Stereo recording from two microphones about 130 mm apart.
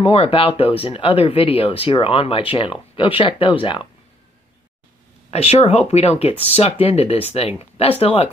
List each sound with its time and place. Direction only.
0.0 s speech: 45° left (ahead or behind)
5.3 s speech: 55° left (ahead or behind)